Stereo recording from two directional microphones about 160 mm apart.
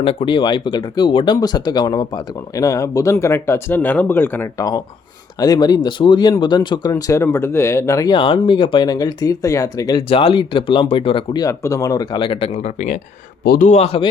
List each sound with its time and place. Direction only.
0.0 s speech: 35° left (ahead or behind); by 4.6 s 10° left (ahead or behind)
5.4 s speech: 25° left (ahead or behind)
6.9 s speech: 15° left (ahead or behind)
10.1 s speech: 35° left (ahead or behind)
11.4 s speech: 20° left (ahead or behind); by 13.0 s 45° left (ahead or behind)
13.4 s speech: 70° left (ahead or behind)
13.7 s speech: 40° left (ahead or behind)